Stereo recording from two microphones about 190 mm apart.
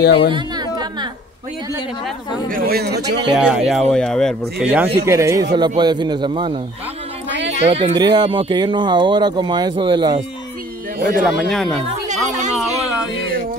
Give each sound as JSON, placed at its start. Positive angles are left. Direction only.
{"t": 0.3, "sound": "chatter", "side_deg": -20}
{"t": 2.5, "sound": "speech", "side_deg": -55}
{"t": 3.3, "sound": "speech", "side_deg": -5}
{"t": 5.0, "sound": "speech", "side_deg": -15}
{"t": 7.6, "sound": "speech", "side_deg": -35}
{"t": 8.0, "sound": "speech", "side_deg": -25}
{"t": 11.0, "sound": "speech", "side_deg": -50}
{"t": 11.2, "sound": "speech", "side_deg": 0}
{"t": 11.9, "sound": "chatter", "side_deg": -40}